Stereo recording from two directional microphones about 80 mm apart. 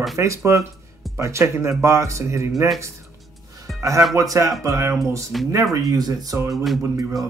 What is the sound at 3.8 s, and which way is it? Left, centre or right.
Speech, right.